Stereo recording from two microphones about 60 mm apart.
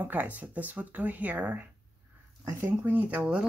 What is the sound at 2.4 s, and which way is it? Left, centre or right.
Speech, right.